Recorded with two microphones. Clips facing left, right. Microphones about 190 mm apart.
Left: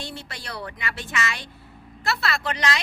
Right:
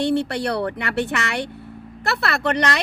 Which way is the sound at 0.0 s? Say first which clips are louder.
Right 16 dB; 65° right (ahead or behind).